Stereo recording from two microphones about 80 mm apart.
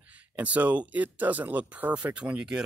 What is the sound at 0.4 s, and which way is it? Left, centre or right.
Speech, centre.